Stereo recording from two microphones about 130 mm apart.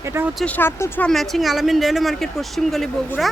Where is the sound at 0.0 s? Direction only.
20° right (ahead or behind).